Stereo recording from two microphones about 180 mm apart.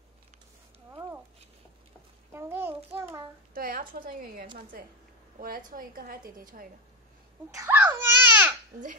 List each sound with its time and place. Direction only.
0.8 s a sound: 15° right (ahead or behind)
2.3 s child singing: 10° right (ahead or behind)
3.5 s a woman's voice: 55° right (ahead or behind)
7.5 s babbling: 15° right (ahead or behind)